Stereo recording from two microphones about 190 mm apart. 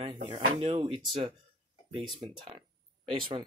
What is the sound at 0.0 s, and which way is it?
Speech, 25° right (ahead or behind).